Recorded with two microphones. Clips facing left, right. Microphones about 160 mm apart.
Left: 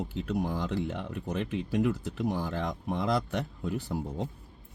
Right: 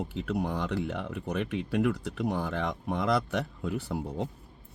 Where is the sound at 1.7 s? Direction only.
65° right (ahead or behind).